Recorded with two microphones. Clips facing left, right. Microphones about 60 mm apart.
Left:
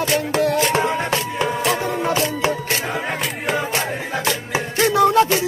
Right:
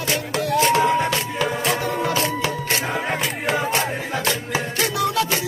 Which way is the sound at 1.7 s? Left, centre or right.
Left.